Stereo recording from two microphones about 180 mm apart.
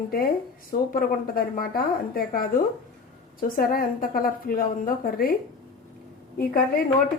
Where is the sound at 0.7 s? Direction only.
50° left (ahead or behind).